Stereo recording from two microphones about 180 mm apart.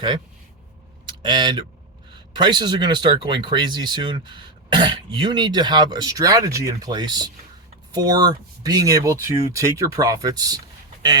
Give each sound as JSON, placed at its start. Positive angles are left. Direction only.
{"t": 1.0, "sound": "speech", "side_deg": -25}